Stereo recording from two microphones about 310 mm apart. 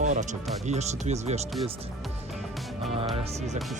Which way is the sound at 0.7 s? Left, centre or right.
Right.